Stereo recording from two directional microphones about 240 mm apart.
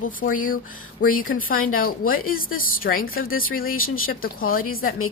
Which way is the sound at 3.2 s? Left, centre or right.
Left.